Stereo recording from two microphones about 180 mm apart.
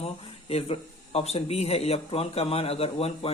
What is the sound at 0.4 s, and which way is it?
Speech, 35° left (ahead or behind).